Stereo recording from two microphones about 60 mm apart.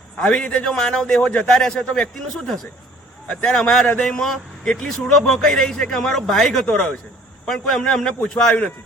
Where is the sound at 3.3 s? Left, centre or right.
Left.